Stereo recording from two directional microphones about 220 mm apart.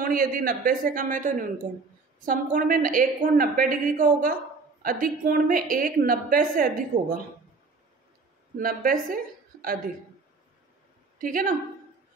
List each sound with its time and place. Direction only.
0.0 s a woman's voice: 40° right (ahead or behind)
8.5 s a woman's voice: 40° right (ahead or behind)
9.1 s a sound: 40° right (ahead or behind)
11.1 s a woman's voice: 40° right (ahead or behind)